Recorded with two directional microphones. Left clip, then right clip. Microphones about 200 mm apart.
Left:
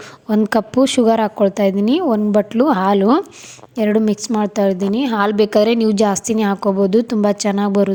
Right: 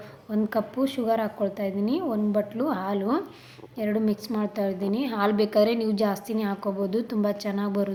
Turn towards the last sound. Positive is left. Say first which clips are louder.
# left 12 dB
turn(degrees=40)  # may be behind; listen again after turning